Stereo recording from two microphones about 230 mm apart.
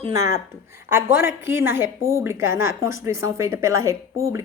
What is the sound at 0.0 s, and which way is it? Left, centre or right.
A woman's voice, centre.